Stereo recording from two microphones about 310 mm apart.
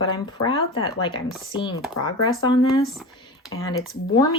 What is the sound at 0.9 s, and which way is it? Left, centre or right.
Speech, centre.